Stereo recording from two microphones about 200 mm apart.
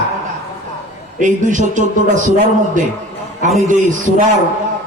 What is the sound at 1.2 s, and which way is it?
A man's voice, 40° right (ahead or behind).